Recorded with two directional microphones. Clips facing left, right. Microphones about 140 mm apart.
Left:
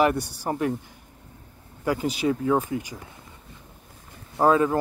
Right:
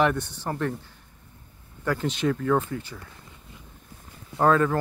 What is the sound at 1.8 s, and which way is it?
Speech, 10° left (ahead or behind).